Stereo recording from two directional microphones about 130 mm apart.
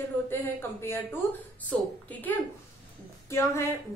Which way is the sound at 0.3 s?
20° left (ahead or behind).